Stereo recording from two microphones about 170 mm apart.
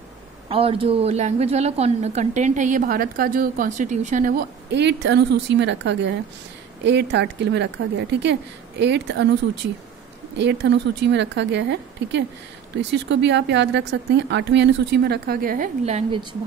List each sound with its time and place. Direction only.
0.5 s a woman's voice: 35° right (ahead or behind); by 9.3 s 90° right
10.3 s a woman's voice: 90° right; by 15.7 s 55° right (ahead or behind)
15.8 s a woman's voice: 40° right (ahead or behind)